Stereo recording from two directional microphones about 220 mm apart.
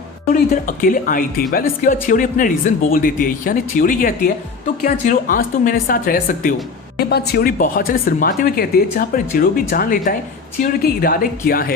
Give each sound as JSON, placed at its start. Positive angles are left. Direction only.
{"t": 0.5, "sound": "speech", "side_deg": 40}